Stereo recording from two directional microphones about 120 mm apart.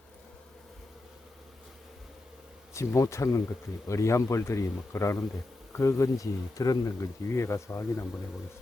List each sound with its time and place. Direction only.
2.7 s speech: 25° left (ahead or behind)